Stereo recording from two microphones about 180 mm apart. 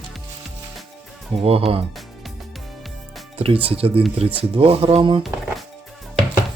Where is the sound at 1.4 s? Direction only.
30° right (ahead or behind).